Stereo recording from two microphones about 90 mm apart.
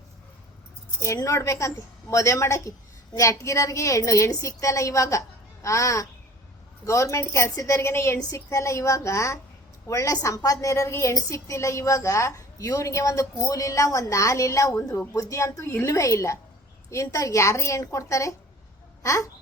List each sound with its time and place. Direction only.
1.0 s a woman's voice: 35° left (ahead or behind)